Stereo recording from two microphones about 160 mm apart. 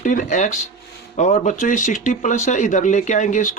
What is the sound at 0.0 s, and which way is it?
Speech, 55° left (ahead or behind).